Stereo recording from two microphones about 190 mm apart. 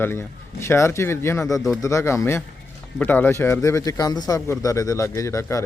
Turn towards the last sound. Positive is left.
turn(degrees=15)  # may be behind; listen again after turning